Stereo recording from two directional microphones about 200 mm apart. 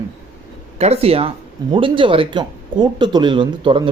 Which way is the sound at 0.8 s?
30° right (ahead or behind).